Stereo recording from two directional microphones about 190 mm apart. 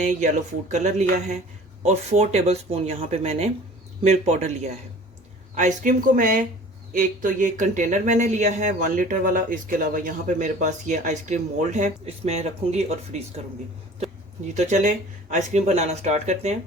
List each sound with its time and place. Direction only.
0.0 s speech: 40° right (ahead or behind)
14.5 s speech: 40° right (ahead or behind)